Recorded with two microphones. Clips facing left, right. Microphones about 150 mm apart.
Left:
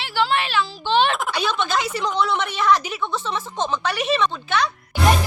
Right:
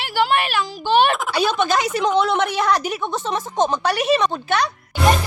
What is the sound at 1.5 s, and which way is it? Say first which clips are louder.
A woman's voice: right 4 dB; 40° right (ahead or behind).